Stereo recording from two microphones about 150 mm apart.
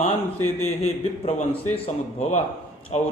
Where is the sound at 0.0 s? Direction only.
45° left (ahead or behind).